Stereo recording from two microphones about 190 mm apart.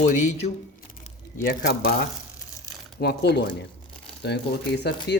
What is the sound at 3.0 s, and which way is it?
Speech, 60° left (ahead or behind).